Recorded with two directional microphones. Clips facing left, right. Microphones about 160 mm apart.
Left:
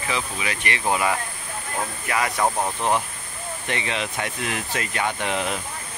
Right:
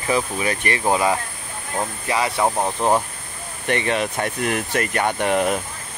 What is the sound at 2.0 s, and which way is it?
Speech, 25° right (ahead or behind).